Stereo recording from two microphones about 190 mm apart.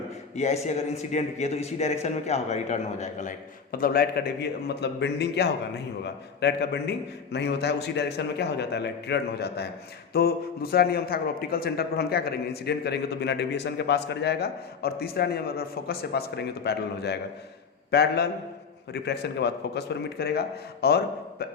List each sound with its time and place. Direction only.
0.3 s a man's voice: 35° left (ahead or behind); by 21.4 s 55° left (ahead or behind)